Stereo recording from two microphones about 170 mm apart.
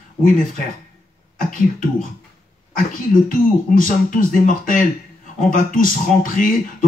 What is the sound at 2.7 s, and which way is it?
Speech, 50° left (ahead or behind).